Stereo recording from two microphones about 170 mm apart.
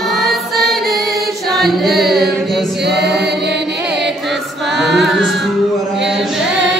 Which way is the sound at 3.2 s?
75° right (ahead or behind).